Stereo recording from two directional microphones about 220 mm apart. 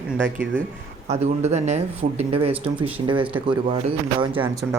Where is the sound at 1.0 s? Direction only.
30° right (ahead or behind).